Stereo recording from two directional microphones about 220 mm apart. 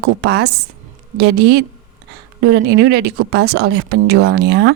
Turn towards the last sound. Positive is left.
turn(degrees=-50)  # may be behind; listen again after turning